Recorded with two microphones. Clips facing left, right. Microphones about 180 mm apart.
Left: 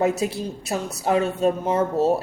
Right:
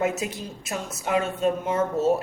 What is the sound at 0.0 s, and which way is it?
A man's voice, 35° left (ahead or behind).